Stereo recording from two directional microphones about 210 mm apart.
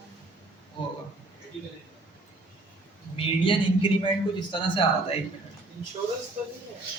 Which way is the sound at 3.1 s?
25° left (ahead or behind).